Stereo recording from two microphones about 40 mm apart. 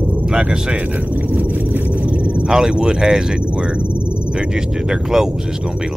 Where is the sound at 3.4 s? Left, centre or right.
Right.